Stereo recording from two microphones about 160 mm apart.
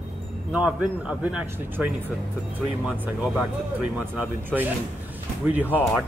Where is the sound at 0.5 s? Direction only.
5° right (ahead or behind).